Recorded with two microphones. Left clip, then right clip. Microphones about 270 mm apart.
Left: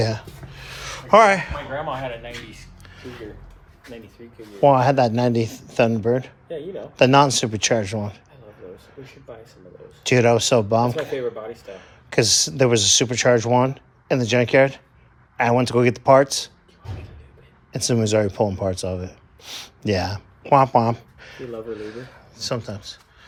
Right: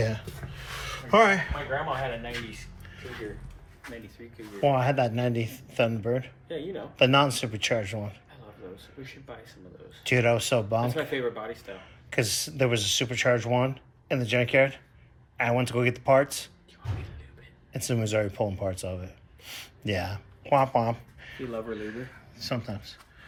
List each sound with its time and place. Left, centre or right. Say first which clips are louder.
0.9 s speech: left 7 dB; centre
4.6 s speech: left 9 dB; centre
10.0 s speech: left 7 dB; centre
17.7 s speech: left 9 dB; centre